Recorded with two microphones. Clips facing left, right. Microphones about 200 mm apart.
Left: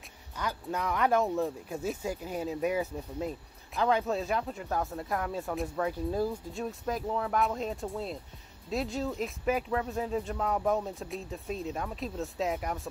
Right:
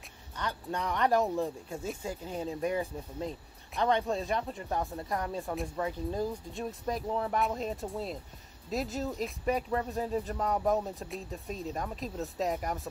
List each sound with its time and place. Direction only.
0.4 s speech: 5° left (ahead or behind)